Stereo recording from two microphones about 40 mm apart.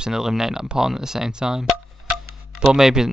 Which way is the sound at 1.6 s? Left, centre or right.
Centre.